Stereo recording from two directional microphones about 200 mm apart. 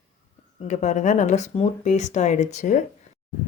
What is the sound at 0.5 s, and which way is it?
Speech, 35° left (ahead or behind).